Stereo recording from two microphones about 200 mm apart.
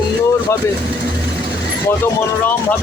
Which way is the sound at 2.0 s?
10° left (ahead or behind).